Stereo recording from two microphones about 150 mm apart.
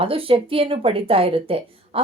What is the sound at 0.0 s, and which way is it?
A woman's voice, 35° right (ahead or behind).